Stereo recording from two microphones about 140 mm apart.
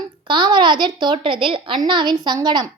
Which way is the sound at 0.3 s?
35° right (ahead or behind).